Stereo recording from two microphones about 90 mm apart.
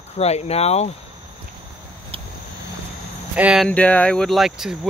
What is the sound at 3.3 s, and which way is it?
Speech, 15° right (ahead or behind).